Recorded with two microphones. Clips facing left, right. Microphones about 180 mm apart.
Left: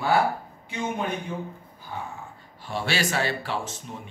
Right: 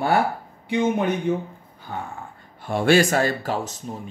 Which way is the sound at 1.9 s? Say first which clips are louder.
Right 4 dB; 75° right (ahead or behind).